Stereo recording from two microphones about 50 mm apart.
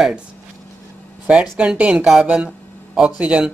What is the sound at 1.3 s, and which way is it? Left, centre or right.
Speech, right.